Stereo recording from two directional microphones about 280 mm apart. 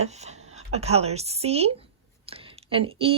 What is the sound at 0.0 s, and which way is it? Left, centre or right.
Speech, right.